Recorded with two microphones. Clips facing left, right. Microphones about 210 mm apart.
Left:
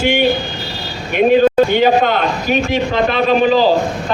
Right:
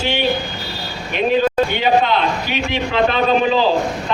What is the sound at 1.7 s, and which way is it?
A man's voice, 45° left (ahead or behind).